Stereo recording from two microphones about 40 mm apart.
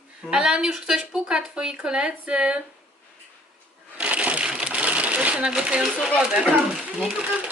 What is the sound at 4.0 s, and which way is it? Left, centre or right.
Crushing, right.